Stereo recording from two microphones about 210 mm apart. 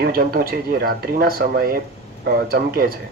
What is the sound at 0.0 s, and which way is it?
Speech, 45° right (ahead or behind).